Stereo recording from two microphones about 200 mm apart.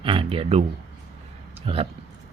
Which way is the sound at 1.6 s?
30° right (ahead or behind).